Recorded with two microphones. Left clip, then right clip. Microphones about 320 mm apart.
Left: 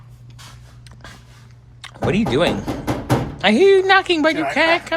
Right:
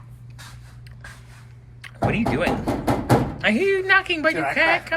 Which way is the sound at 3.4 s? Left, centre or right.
Centre.